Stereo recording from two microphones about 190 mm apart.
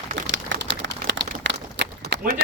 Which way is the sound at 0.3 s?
70° right (ahead or behind).